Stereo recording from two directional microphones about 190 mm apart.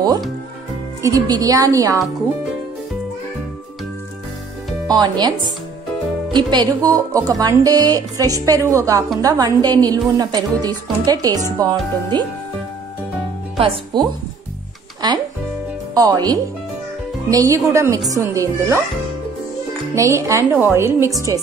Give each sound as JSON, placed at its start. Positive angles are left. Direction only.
{"t": 1.0, "sound": "a woman's voice", "side_deg": -20}
{"t": 4.8, "sound": "speech", "side_deg": -20}
{"t": 6.3, "sound": "speech", "side_deg": -25}
{"t": 13.6, "sound": "speech", "side_deg": -30}
{"t": 15.9, "sound": "a woman's voice", "side_deg": -20}
{"t": 20.0, "sound": "a woman's voice", "side_deg": -15}